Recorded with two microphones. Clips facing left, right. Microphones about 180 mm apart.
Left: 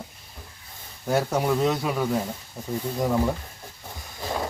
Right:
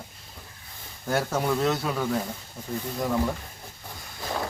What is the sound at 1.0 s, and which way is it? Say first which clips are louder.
Speech: left 3 dB; 15° left (ahead or behind).